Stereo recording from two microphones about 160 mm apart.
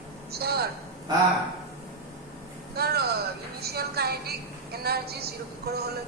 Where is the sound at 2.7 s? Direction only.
80° right.